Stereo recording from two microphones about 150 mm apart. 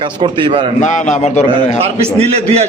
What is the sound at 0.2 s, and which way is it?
Speech, 35° right (ahead or behind).